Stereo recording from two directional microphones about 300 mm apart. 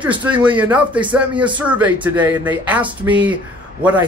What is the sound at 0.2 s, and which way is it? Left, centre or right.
Speech, centre.